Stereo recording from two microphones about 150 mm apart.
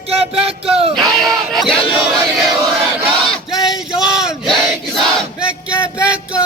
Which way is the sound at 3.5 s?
Centre (ahead or behind).